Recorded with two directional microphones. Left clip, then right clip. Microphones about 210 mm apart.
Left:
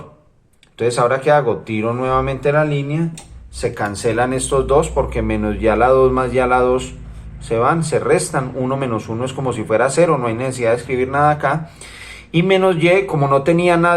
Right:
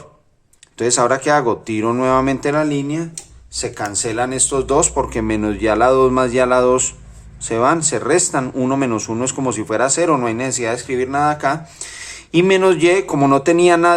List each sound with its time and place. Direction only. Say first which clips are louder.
0.8 s speech: even; 45° right (ahead or behind)
3.6 s speech: left 3 dB; 30° right (ahead or behind)